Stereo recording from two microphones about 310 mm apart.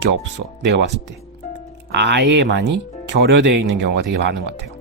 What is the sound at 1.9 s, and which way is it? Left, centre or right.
Speech, right.